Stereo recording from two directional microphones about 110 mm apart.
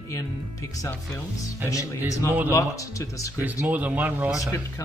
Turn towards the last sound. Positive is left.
turn(degrees=30)  # may be behind; listen again after turning